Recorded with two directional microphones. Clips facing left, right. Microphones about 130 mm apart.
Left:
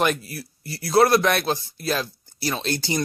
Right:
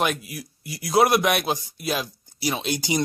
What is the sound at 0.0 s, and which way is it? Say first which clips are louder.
Speech: left 2 dB; 5° right (ahead or behind).